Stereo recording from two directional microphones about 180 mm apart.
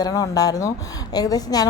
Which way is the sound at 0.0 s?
20° left (ahead or behind).